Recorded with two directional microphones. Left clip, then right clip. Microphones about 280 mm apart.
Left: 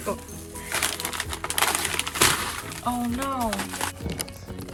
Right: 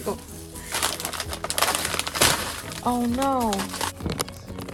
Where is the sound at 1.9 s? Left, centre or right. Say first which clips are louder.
Right 1 dB; centre.